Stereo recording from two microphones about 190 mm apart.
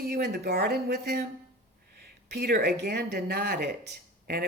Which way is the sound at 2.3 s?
60° right (ahead or behind).